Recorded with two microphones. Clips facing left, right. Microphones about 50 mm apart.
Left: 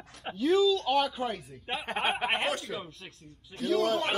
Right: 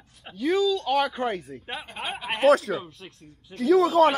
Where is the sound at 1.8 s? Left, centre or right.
Left.